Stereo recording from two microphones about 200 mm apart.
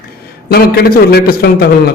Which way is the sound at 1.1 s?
50° left (ahead or behind).